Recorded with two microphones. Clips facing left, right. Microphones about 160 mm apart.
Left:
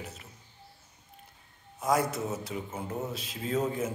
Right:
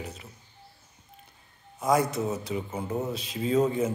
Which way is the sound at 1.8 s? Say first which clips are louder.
Right 3 dB; 5° left (ahead or behind).